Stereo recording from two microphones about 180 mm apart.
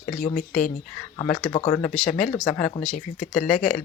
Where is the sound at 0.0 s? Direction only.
40° left (ahead or behind).